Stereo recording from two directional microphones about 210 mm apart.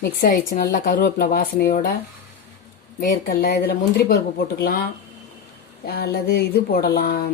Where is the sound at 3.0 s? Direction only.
45° left (ahead or behind).